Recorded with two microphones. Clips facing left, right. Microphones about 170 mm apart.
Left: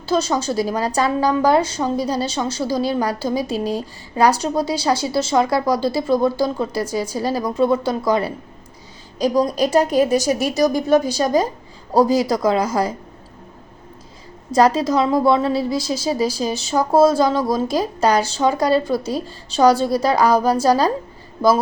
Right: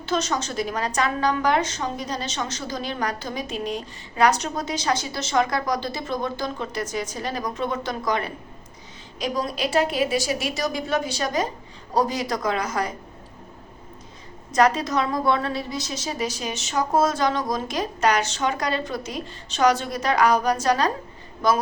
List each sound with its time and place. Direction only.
0.0 s a woman's voice: 30° left (ahead or behind)
14.5 s a woman's voice: 30° left (ahead or behind)